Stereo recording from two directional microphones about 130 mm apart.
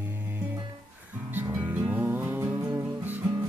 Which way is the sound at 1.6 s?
10° right (ahead or behind).